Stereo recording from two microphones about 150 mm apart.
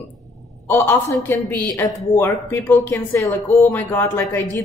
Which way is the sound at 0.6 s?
15° left (ahead or behind).